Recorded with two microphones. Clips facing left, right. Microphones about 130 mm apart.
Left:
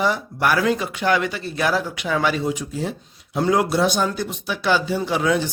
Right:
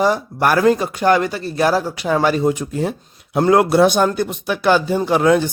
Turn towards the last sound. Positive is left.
turn(degrees=-55)  # may be behind; listen again after turning